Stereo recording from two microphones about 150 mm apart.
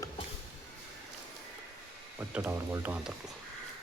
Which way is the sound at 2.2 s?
15° right (ahead or behind).